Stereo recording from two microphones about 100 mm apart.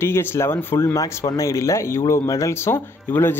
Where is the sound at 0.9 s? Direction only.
35° left (ahead or behind).